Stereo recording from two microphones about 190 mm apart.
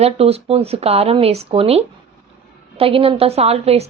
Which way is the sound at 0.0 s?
30° right (ahead or behind).